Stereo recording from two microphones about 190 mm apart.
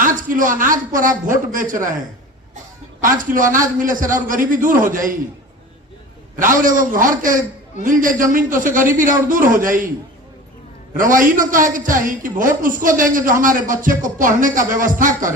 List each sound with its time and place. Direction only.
0.0 s a woman's voice: 45° right (ahead or behind)
3.0 s a woman's voice: 45° right (ahead or behind)
6.3 s a woman's voice: 45° right (ahead or behind)
10.9 s a woman's voice: 45° right (ahead or behind)